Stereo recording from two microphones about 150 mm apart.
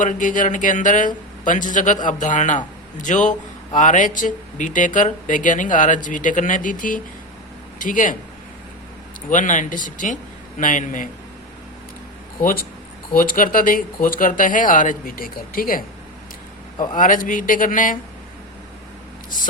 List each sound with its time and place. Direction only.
0.0 s speech: 55° left (ahead or behind)
9.3 s speech: 60° left (ahead or behind)
13.1 s speech: 65° left (ahead or behind)
16.9 s speech: 65° left (ahead or behind)